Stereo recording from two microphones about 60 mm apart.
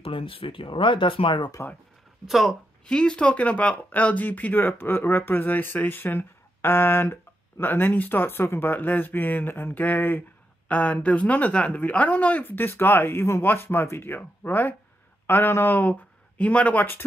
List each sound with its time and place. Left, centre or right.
1.6 s a man's voice: left
2.2 s speech: centre
2.8 s a man's voice: centre; by 15.9 s left
15.9 s speech: left